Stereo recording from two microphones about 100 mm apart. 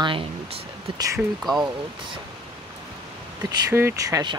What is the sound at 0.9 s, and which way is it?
Speech, 35° right (ahead or behind).